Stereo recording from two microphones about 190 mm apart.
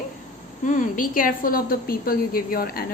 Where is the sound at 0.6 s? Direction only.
45° left (ahead or behind).